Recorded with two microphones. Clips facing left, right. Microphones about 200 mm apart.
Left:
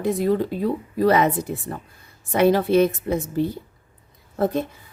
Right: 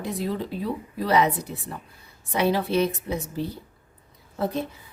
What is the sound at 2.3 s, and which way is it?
A woman's voice, 50° left (ahead or behind).